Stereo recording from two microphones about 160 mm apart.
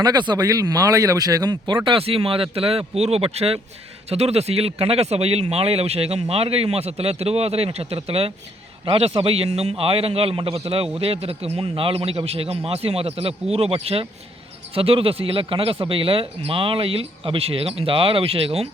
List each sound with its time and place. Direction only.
0.0 s speech: 25° right (ahead or behind)